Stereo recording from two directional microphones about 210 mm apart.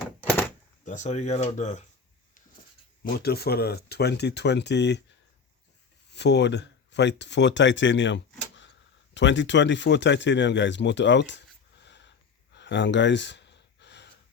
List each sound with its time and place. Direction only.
0.2 s door: 10° left (ahead or behind)
0.9 s speech: 35° left (ahead or behind)
3.0 s speech: 50° left (ahead or behind)
6.1 s speech: 55° left (ahead or behind)
12.5 s gasp: 55° left (ahead or behind)